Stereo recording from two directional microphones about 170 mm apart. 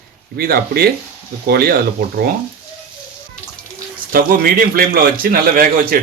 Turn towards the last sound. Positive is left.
turn(degrees=-55)  # may be behind; listen again after turning